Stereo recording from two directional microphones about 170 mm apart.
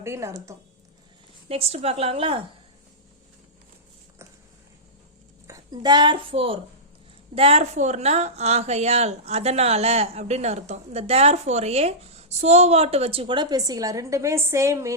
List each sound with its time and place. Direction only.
0.0 s speech: 15° right (ahead or behind)
1.5 s a woman's voice: 35° right (ahead or behind)
5.5 s a woman's voice: 20° right (ahead or behind)